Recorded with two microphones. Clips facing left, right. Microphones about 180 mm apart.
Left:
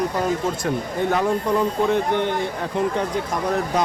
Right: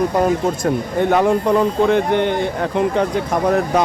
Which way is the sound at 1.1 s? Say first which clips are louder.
Right 6 dB; 75° right (ahead or behind).